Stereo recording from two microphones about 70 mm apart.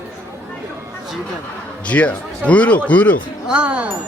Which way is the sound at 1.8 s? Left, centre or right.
Centre.